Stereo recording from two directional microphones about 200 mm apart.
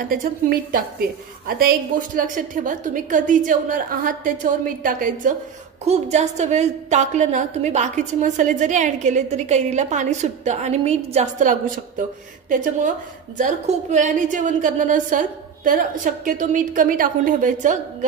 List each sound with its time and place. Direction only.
0.1 s a woman's voice: 45° right (ahead or behind)